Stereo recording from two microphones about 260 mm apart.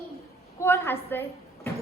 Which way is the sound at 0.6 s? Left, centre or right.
Centre.